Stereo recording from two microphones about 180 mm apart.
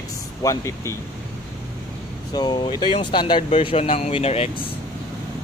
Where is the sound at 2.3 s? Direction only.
25° left (ahead or behind).